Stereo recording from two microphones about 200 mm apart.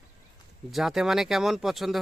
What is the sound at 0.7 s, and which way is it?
Speech, centre (ahead or behind).